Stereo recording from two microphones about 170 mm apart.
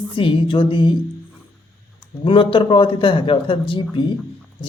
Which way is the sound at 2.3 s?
30° left (ahead or behind).